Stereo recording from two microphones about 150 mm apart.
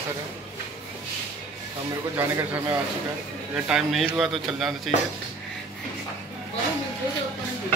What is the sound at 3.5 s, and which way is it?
Speech, 5° right (ahead or behind).